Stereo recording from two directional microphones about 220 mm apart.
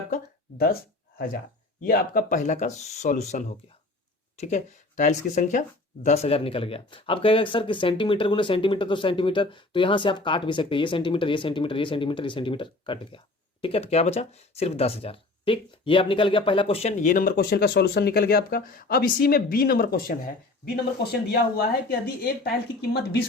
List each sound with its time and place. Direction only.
1.8 s a woman's voice: 40° left (ahead or behind)